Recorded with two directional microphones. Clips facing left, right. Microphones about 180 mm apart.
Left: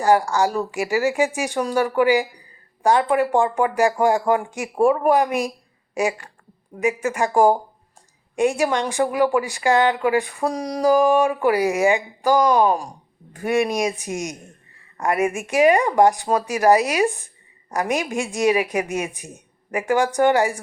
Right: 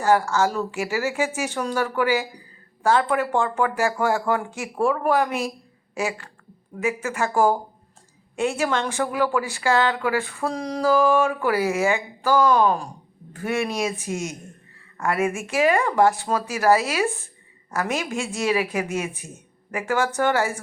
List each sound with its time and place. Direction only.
0.0 s a woman's voice: 15° left (ahead or behind)